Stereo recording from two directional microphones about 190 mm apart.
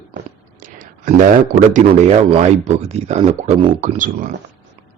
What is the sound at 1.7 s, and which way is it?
Speech, 35° right (ahead or behind).